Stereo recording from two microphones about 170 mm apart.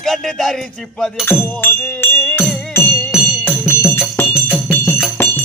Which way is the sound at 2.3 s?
10° left (ahead or behind).